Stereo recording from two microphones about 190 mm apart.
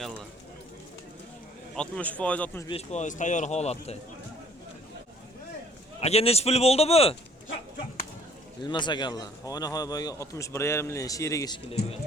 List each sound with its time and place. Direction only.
1.7 s speech: 5° left (ahead or behind)
2.6 s speech: 35° left (ahead or behind)
6.0 s speech: 30° left (ahead or behind)
8.6 s speech: 25° left (ahead or behind)